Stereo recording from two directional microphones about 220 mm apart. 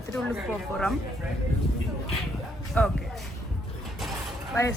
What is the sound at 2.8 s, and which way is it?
Speech, 5° left (ahead or behind).